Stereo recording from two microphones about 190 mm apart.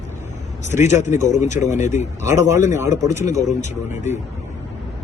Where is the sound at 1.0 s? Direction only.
40° left (ahead or behind).